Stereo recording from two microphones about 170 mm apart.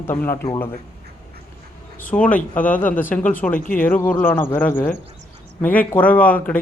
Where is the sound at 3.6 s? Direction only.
55° left (ahead or behind).